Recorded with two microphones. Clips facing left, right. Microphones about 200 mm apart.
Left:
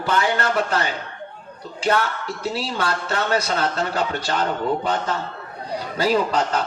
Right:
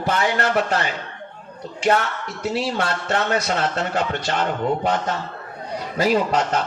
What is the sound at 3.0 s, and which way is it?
A man's voice, 35° left (ahead or behind).